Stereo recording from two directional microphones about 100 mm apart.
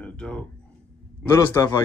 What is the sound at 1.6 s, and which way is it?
Speech, 35° left (ahead or behind).